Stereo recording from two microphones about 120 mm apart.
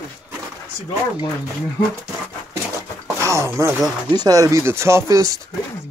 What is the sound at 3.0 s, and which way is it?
Speech, 25° right (ahead or behind).